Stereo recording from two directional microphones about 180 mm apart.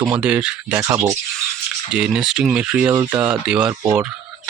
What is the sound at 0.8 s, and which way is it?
Speech, 15° right (ahead or behind).